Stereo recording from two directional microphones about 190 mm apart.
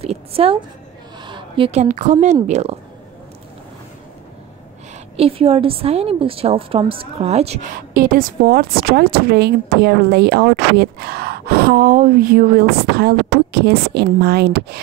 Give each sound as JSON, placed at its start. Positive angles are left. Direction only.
{"t": 0.0, "sound": "a woman's voice", "side_deg": -30}
{"t": 5.1, "sound": "a woman's voice", "side_deg": -30}
{"t": 7.7, "sound": "speech", "side_deg": -50}